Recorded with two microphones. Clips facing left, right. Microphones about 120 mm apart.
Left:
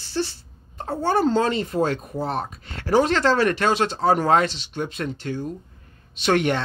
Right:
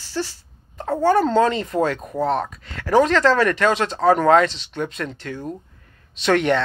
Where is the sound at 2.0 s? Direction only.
80° right.